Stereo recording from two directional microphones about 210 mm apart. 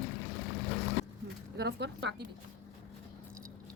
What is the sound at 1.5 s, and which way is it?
Speech, 55° right (ahead or behind).